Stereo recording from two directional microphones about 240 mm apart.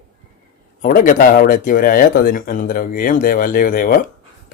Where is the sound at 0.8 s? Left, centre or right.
Left.